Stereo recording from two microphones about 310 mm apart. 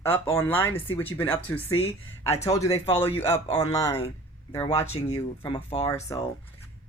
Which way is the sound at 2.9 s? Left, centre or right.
Centre.